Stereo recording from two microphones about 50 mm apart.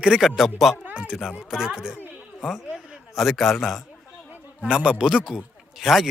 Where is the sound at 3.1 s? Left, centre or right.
Centre.